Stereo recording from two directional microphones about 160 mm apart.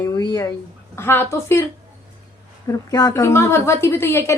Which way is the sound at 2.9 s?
20° left (ahead or behind).